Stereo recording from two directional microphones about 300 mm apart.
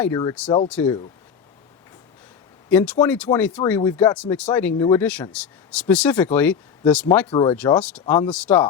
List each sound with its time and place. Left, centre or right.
0.0 s speech: centre
2.6 s speech: centre
7.3 s speech: centre
7.5 s speech: centre